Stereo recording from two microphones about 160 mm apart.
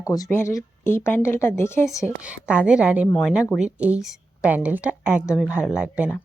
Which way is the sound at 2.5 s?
5° right (ahead or behind).